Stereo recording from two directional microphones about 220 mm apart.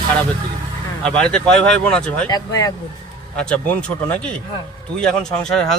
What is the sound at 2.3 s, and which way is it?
Speech, 15° left (ahead or behind).